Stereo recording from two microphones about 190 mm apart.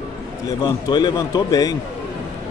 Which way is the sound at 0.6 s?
20° left (ahead or behind).